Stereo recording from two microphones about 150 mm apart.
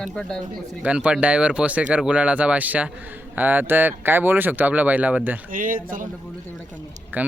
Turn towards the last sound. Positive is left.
turn(degrees=-10)  # may be behind; listen again after turning